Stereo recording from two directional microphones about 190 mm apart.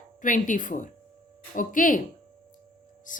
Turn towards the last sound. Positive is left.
turn(degrees=45)  # may be behind; listen again after turning